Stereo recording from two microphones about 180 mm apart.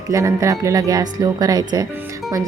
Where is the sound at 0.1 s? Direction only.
15° right (ahead or behind).